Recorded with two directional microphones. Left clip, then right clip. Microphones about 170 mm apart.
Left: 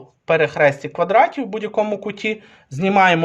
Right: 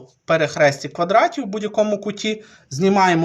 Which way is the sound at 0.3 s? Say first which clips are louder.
Left 1 dB; 40° left (ahead or behind).